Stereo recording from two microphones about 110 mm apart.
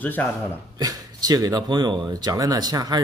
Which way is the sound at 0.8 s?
35° right (ahead or behind).